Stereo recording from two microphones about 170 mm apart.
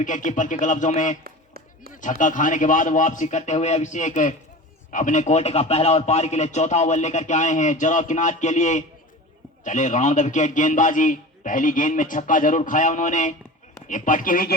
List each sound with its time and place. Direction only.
0.0 s a man's voice: 50° left (ahead or behind)
1.2 s a sound: 60° right (ahead or behind)
1.9 s a man's voice: 50° left (ahead or behind)